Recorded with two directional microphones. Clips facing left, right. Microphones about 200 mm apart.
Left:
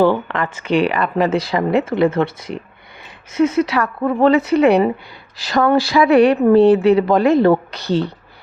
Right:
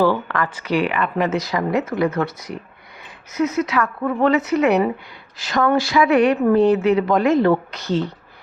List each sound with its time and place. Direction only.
0.0 s speech: 25° left (ahead or behind)